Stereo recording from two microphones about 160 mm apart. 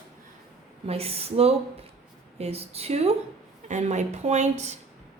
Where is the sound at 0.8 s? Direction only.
40° right (ahead or behind).